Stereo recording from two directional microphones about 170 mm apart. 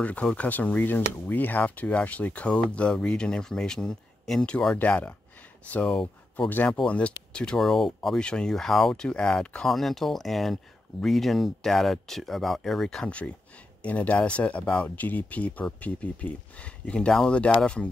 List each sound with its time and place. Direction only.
0.0 s speech: 5° left (ahead or behind)